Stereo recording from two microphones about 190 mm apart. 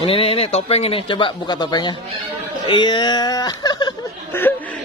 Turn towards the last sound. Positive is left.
turn(degrees=10)  # may be behind; listen again after turning